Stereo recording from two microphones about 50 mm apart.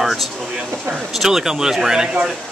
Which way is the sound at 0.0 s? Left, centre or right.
Centre.